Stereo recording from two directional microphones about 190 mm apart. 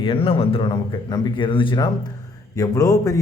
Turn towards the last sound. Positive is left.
turn(degrees=20)  # may be behind; listen again after turning